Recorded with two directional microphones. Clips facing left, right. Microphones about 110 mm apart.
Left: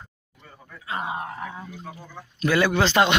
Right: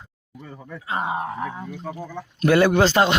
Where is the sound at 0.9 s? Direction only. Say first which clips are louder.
Right 4 dB; 30° right (ahead or behind).